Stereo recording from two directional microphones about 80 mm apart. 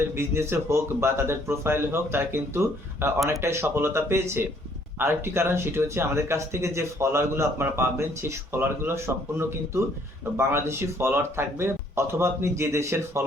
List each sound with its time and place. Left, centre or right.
0.1 s speech: right